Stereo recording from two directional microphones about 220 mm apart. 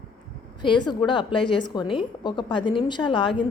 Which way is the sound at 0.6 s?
20° left (ahead or behind).